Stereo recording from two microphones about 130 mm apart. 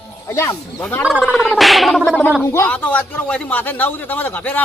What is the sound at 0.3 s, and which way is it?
Speech, 20° left (ahead or behind).